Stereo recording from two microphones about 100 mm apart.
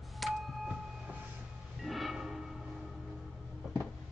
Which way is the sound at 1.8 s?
Centre (ahead or behind).